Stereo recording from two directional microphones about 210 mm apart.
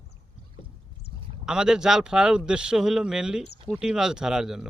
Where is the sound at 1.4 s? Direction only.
5° right (ahead or behind).